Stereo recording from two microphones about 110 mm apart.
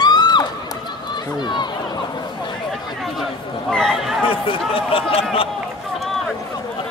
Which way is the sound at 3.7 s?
5° left (ahead or behind).